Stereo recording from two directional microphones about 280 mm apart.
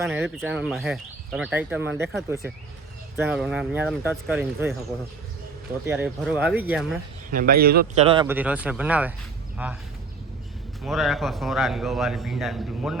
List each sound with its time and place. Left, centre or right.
0.1 s speech: centre
5.8 s speech: centre
7.3 s a man's voice: right
8.0 s speech: centre
10.8 s speech: centre